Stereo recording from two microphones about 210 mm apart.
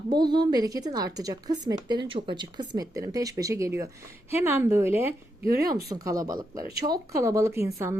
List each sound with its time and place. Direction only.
0.1 s a woman's voice: 20° right (ahead or behind)